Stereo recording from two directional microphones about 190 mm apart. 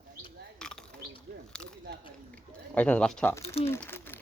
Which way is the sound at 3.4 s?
30° left (ahead or behind).